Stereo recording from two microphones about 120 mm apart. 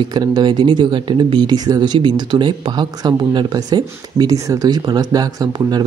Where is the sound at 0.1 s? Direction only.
35° right (ahead or behind).